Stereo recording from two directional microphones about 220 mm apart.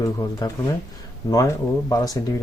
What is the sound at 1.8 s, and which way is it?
Speech, 15° left (ahead or behind).